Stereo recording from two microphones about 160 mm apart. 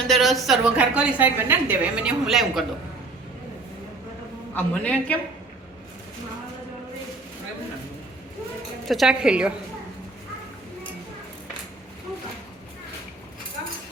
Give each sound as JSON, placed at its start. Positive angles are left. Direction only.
{"t": 0.1, "sound": "a woman's voice", "side_deg": 0}
{"t": 4.5, "sound": "a woman's voice", "side_deg": 10}
{"t": 8.9, "sound": "a woman's voice", "side_deg": -5}